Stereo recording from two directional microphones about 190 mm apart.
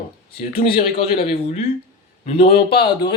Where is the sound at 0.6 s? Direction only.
55° left (ahead or behind).